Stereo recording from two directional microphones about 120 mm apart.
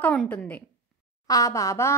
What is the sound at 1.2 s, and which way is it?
Speech, 30° left (ahead or behind).